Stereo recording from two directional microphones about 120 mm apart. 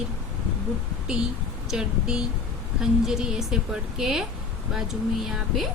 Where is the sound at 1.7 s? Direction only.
5° right (ahead or behind).